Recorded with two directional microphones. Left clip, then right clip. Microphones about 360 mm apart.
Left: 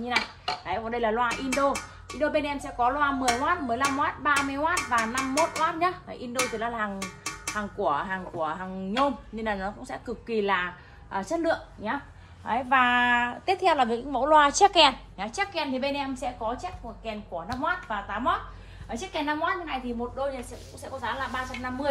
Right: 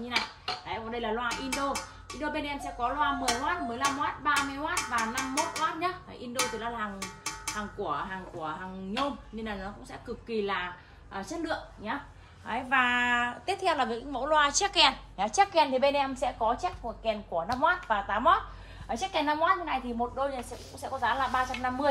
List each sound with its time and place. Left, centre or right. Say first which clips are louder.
0.1 s a woman's voice: left 4 dB; centre
15.1 s a woman's voice: right 5 dB; centre
21.1 s a woman's voice: right 3 dB; centre